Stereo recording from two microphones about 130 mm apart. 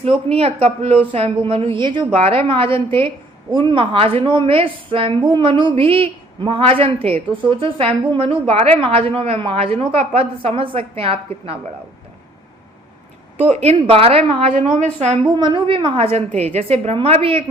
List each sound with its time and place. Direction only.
0.0 s a woman's voice: 45° right (ahead or behind)
13.5 s a woman's voice: 50° right (ahead or behind)
14.6 s a woman's voice: 65° right (ahead or behind)
15.4 s a woman's voice: 40° right (ahead or behind)
16.3 s a woman's voice: 55° right (ahead or behind)